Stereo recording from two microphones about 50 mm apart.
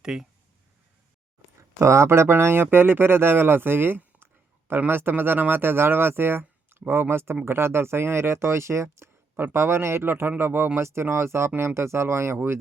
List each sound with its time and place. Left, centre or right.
0.0 s speech: centre
1.8 s speech: right
9.3 s speech: right
10.8 s speech: right